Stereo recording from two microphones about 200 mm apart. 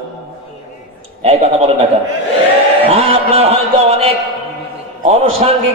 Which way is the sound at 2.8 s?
30° right (ahead or behind).